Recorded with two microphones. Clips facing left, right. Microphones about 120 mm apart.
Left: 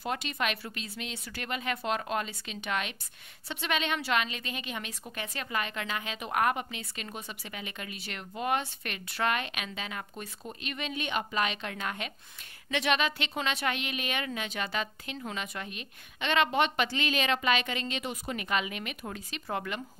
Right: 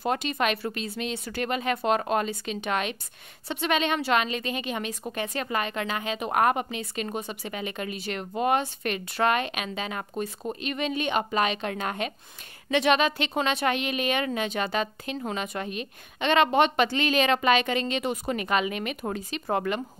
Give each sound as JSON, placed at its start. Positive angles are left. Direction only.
{"t": 0.0, "sound": "a woman's voice", "side_deg": -45}